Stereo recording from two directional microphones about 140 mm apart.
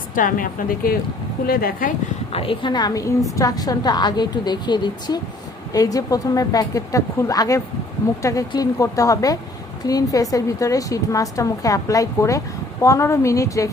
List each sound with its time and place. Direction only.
0.1 s a woman's voice: 75° left (ahead or behind); by 1.9 s 90° left
2.3 s a woman's voice: 40° left (ahead or behind); by 13.7 s 25° left (ahead or behind)